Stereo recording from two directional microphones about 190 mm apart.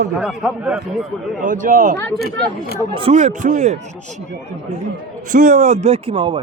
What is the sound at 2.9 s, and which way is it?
Speech, 30° right (ahead or behind).